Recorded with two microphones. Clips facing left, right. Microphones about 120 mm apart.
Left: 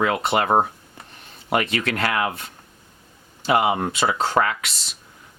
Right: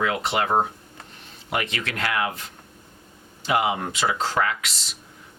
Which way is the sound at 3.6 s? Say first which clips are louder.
Left 2 dB; 45° left (ahead or behind).